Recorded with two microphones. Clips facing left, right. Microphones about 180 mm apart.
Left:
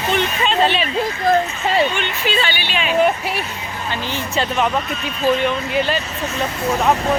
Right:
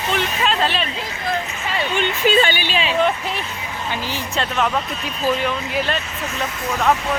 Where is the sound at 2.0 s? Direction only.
45° right (ahead or behind).